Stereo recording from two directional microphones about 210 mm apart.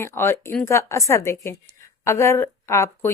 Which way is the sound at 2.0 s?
15° left (ahead or behind).